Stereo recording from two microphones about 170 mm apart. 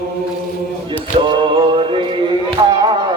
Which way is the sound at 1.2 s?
30° right (ahead or behind).